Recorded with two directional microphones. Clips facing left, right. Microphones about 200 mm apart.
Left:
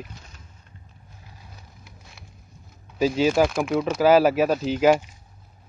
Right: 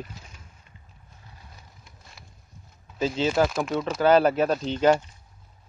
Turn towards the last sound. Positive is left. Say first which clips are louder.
# left 2 dB
turn(degrees=10)  # may be behind; listen again after turning